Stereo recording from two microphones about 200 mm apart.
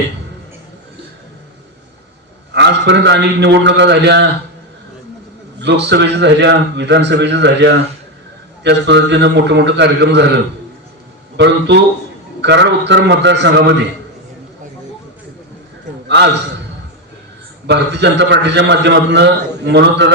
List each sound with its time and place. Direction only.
2.5 s a man's voice: 60° right (ahead or behind)
5.5 s a man's voice: 60° right (ahead or behind)
11.3 s a man's voice: 60° right (ahead or behind)
16.0 s a man's voice: 60° right (ahead or behind)
17.7 s a man's voice: 60° right (ahead or behind)